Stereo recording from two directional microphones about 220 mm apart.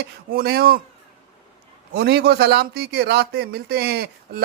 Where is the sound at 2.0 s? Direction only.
50° right (ahead or behind).